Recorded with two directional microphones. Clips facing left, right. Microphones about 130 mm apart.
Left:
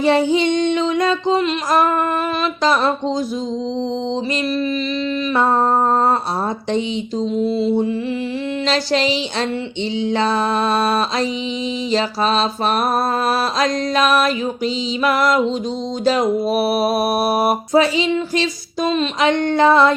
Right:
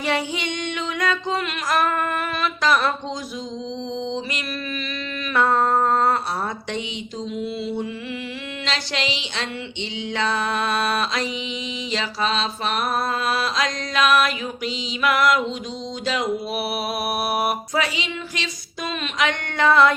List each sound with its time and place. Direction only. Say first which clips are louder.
0.0 s music: left 10 dB; 30° left (ahead or behind)
5.3 s music: left 2 dB; 25° left (ahead or behind)
6.7 s a sound: left 9 dB; 35° left (ahead or behind)